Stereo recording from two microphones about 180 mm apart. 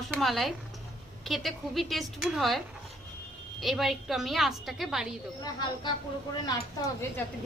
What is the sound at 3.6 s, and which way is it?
A woman's voice, centre (ahead or behind).